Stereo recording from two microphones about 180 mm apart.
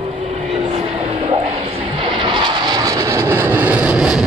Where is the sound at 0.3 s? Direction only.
35° right (ahead or behind).